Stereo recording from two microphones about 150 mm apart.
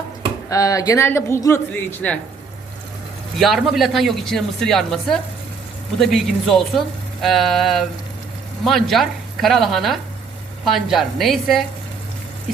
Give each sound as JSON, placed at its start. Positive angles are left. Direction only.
{"t": 0.5, "sound": "speech", "side_deg": 20}
{"t": 3.3, "sound": "speech", "side_deg": 0}